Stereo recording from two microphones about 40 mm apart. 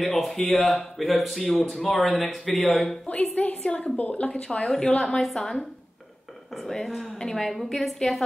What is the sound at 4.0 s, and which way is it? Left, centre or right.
Speech, left.